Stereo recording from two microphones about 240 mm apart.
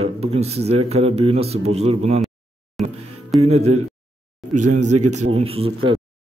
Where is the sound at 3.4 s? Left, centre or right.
Right.